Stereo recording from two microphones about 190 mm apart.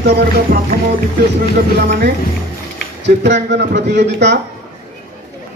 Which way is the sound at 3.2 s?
65° right (ahead or behind).